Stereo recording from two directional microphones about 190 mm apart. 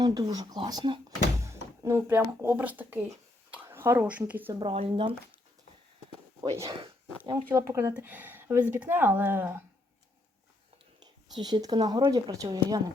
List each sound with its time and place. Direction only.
0.0 s speech: 20° right (ahead or behind)
4.6 s speech: 30° right (ahead or behind)
6.6 s speech: 20° right (ahead or behind)
11.0 s speech: 20° right (ahead or behind)